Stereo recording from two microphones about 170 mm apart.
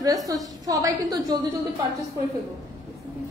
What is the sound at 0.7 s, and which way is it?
Speech, 20° right (ahead or behind).